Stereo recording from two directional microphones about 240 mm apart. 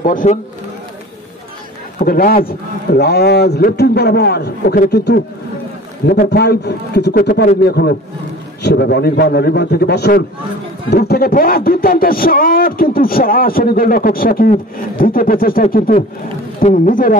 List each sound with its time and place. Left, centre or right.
0.0 s a man's voice: left
2.0 s a man's voice: left